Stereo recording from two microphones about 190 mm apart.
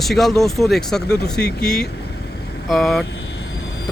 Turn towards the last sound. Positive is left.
turn(degrees=65)  # may be behind; listen again after turning